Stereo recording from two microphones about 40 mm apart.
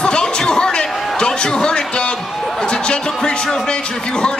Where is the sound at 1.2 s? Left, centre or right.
Centre.